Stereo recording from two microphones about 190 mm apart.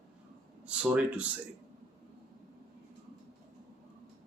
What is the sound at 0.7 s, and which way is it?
Speech, 5° right (ahead or behind).